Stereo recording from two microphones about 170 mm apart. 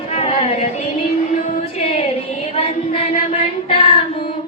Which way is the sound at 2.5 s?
35° left (ahead or behind).